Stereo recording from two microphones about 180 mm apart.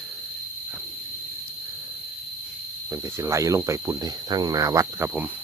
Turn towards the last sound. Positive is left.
turn(degrees=-10)  # may be behind; listen again after turning